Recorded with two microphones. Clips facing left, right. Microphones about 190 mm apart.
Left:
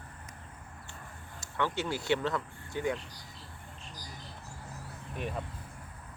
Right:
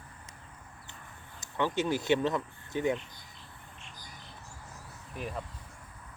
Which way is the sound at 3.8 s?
35° left (ahead or behind).